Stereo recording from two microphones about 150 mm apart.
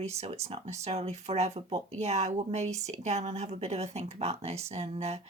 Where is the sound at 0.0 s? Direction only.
45° right (ahead or behind).